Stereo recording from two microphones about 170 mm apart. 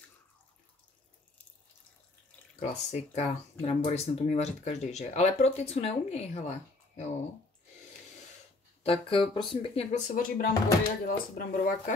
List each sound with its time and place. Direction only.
2.7 s speech: 40° left (ahead or behind)
8.8 s speech: 35° left (ahead or behind); by 11.9 s 55° left (ahead or behind)